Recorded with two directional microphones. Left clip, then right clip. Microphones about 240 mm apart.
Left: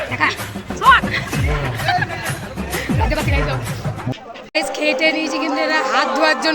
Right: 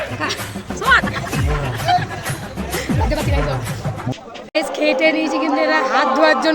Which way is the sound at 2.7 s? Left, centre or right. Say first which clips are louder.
Left 1 dB; centre.